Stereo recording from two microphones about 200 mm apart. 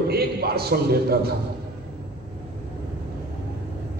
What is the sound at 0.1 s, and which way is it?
A man's voice, 50° right (ahead or behind).